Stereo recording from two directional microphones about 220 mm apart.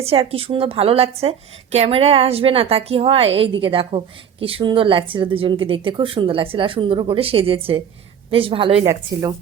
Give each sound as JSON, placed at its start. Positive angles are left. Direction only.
{"t": 0.0, "sound": "a woman's voice", "side_deg": -25}